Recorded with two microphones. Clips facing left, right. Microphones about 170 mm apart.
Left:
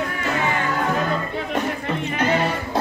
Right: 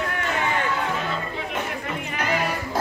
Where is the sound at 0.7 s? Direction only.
45° left (ahead or behind).